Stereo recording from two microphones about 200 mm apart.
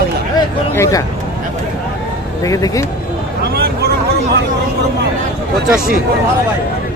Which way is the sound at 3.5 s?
50° right (ahead or behind).